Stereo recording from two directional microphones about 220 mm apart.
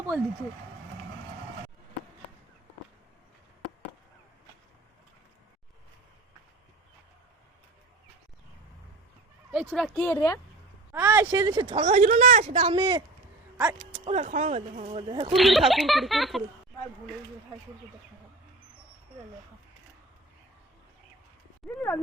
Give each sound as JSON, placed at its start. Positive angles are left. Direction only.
{"t": 9.5, "sound": "speech", "side_deg": 0}
{"t": 10.9, "sound": "speech", "side_deg": -15}
{"t": 11.7, "sound": "a woman's voice", "side_deg": -35}
{"t": 12.6, "sound": "speech", "side_deg": -20}
{"t": 13.6, "sound": "speech", "side_deg": -5}
{"t": 14.0, "sound": "speech", "side_deg": -30}
{"t": 15.3, "sound": "speech", "side_deg": 0}
{"t": 21.8, "sound": "speech", "side_deg": 10}